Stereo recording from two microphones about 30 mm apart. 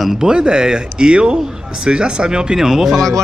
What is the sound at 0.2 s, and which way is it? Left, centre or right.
Speech, right.